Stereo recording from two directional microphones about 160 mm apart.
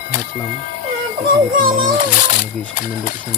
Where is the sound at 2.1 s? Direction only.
55° left (ahead or behind).